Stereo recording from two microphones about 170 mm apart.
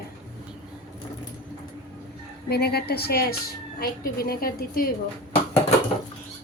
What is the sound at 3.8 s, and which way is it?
A woman's voice, 60° left (ahead or behind).